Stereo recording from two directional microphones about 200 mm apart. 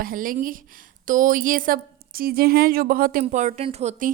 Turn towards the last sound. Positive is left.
turn(degrees=-40)  # may be behind; listen again after turning